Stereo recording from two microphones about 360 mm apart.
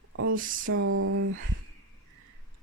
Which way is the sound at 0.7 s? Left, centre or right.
Right.